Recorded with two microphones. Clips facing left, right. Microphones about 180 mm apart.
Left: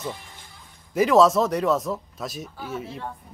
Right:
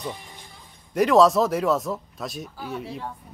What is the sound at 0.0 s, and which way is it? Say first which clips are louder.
Music: even; 15° right (ahead or behind).